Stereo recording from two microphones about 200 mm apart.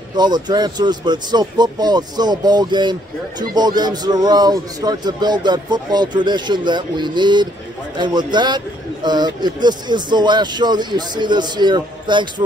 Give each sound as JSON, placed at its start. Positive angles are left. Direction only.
{"t": 0.1, "sound": "speech", "side_deg": -20}